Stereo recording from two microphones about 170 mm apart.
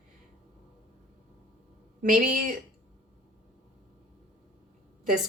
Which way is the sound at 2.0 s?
50° right (ahead or behind).